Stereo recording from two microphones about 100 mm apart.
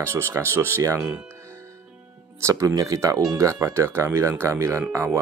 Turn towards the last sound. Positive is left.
turn(degrees=-30)  # may be behind; listen again after turning